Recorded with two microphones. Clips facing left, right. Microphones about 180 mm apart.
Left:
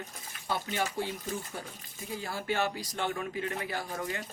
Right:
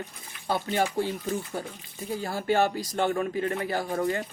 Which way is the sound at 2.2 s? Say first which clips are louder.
Right 7 dB; 40° right (ahead or behind).